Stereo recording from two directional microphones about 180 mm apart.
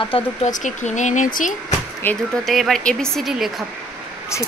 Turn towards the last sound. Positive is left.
turn(degrees=0)  # may be behind; listen again after turning